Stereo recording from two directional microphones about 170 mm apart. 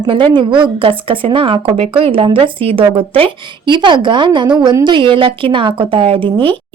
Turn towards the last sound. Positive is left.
turn(degrees=-30)  # may be behind; listen again after turning